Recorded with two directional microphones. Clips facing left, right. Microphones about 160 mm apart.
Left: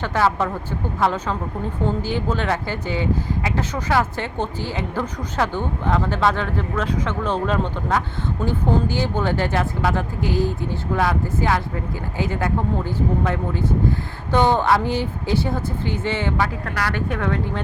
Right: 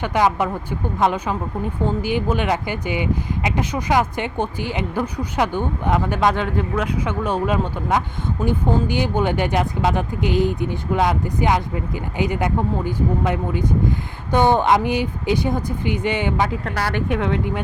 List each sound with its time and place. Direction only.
0.0 s speech: 15° right (ahead or behind)